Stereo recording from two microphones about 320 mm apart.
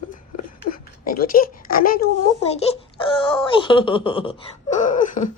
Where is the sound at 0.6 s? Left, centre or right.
Left.